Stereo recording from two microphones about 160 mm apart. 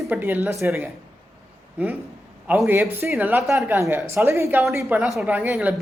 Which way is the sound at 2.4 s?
15° right (ahead or behind).